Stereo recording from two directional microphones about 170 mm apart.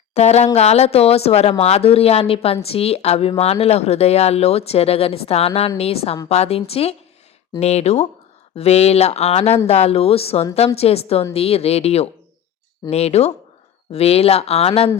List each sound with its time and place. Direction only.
0.1 s speech: 40° left (ahead or behind)